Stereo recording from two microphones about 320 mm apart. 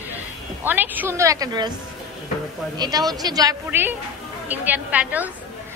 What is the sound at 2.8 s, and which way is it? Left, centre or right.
A man's voice, centre.